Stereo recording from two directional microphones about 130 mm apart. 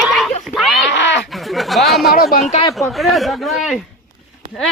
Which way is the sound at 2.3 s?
75° left (ahead or behind).